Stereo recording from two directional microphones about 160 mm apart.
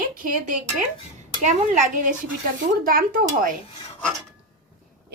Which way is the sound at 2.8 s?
65° right (ahead or behind).